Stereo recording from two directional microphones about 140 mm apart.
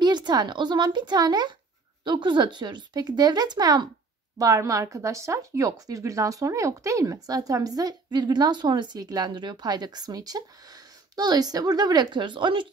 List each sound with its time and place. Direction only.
0.0 s speech: 30° right (ahead or behind)